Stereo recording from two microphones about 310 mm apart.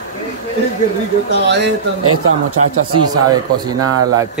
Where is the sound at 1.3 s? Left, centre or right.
Right.